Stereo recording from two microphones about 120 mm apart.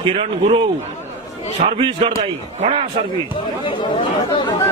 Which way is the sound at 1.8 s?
45° right (ahead or behind).